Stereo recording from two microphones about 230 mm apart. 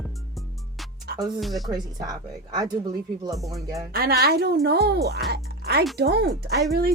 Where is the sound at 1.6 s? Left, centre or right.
Centre.